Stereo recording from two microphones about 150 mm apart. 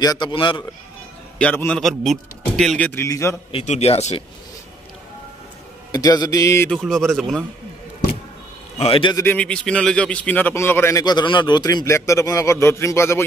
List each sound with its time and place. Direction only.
0.0 s a man's voice: 30° left (ahead or behind)
1.4 s speech: 10° left (ahead or behind)
2.9 s a man's voice: 20° left (ahead or behind)
3.6 s speech: 45° left (ahead or behind)
5.9 s music: 25° left (ahead or behind)
6.7 s speech: centre (ahead or behind)
8.7 s a man's voice: 40° left (ahead or behind)
9.1 s a man's voice: 10° left (ahead or behind)